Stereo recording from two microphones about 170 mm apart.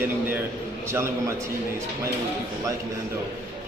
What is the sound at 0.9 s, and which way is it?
Speech, 15° right (ahead or behind).